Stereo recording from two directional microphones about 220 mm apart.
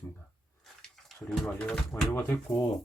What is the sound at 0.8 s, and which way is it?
Speech, centre (ahead or behind).